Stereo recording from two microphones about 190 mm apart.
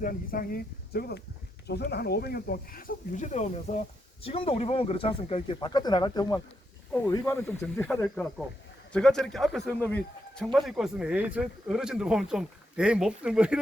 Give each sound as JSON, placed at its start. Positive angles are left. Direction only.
{"t": 0.0, "sound": "a man's voice", "side_deg": 50}